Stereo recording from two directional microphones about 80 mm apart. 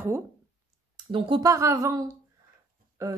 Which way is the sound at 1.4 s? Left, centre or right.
Right.